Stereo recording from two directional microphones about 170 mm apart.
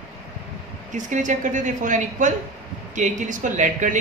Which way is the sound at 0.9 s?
45° right (ahead or behind).